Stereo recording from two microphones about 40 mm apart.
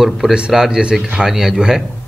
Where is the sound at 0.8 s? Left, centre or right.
Right.